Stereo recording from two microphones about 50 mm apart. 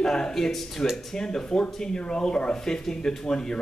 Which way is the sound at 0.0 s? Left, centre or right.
Centre.